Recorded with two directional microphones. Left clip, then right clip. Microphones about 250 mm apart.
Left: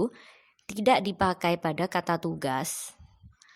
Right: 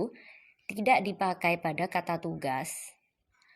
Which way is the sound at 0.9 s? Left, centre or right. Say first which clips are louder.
Left 3 dB; left.